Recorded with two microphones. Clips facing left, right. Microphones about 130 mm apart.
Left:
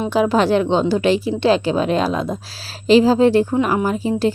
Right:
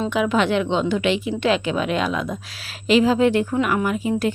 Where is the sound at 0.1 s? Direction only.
35° left (ahead or behind).